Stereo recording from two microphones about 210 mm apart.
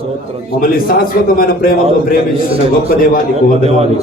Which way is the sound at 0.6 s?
45° left (ahead or behind).